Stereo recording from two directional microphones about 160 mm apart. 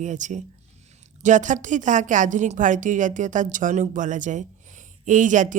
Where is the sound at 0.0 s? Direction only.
50° right (ahead or behind).